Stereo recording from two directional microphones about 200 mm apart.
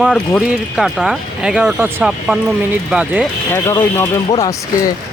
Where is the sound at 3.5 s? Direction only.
10° left (ahead or behind).